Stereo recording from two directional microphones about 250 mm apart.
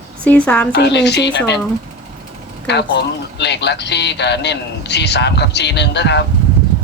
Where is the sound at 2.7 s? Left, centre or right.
Left.